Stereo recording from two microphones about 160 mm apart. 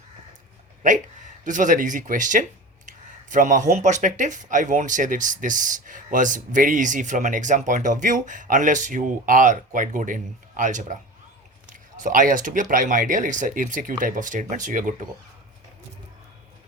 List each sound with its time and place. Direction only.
0.8 s speech: 50° right (ahead or behind)